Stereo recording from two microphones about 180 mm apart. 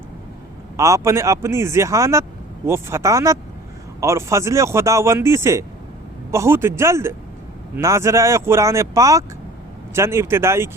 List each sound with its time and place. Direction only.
0.8 s speech: 15° right (ahead or behind)